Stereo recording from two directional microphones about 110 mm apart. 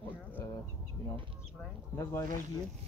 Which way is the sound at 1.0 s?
25° left (ahead or behind).